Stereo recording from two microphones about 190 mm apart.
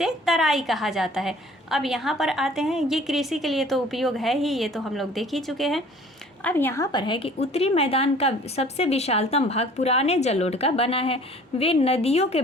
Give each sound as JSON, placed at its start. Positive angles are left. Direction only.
{"t": 0.0, "sound": "a woman's voice", "side_deg": 0}